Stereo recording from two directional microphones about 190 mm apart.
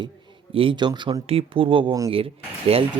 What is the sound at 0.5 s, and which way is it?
Speech, 25° right (ahead or behind).